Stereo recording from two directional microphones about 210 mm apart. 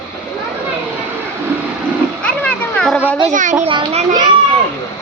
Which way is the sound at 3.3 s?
35° right (ahead or behind).